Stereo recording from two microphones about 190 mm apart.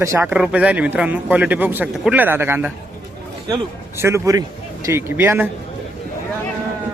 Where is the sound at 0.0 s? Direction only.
15° right (ahead or behind).